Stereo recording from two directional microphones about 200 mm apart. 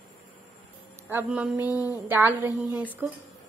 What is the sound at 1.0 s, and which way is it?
A woman's voice, 10° right (ahead or behind).